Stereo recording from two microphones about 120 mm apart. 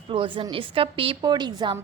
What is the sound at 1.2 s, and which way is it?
Speech, 35° right (ahead or behind).